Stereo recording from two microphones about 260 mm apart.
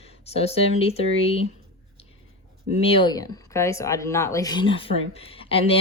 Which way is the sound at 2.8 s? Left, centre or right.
Centre.